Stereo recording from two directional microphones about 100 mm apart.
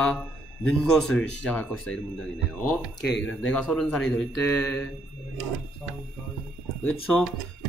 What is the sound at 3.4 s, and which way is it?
Speech, 10° left (ahead or behind).